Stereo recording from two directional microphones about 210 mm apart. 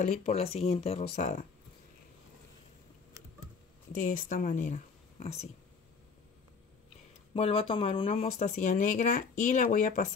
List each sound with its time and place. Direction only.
0.2 s speech: 30° left (ahead or behind)
3.9 s speech: 40° left (ahead or behind)
7.3 s speech: 25° left (ahead or behind)